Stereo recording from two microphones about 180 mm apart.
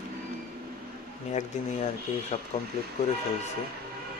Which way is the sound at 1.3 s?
40° left (ahead or behind).